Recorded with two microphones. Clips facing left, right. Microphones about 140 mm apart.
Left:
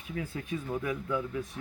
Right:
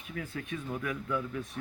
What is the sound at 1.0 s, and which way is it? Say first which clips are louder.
Speech: left 1 dB; 15° left (ahead or behind).